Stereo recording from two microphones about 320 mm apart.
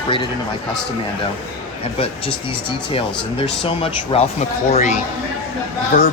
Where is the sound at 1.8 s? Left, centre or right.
Centre.